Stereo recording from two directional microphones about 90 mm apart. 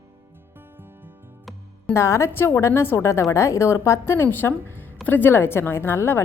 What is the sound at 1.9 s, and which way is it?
A woman's voice, 30° left (ahead or behind).